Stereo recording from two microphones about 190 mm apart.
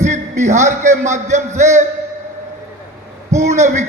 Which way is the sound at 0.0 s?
40° right (ahead or behind).